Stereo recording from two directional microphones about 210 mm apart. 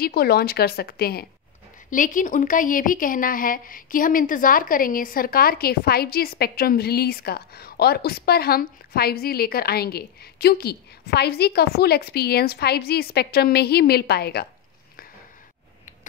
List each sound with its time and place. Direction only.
0.0 s a woman's voice: 45° left (ahead or behind)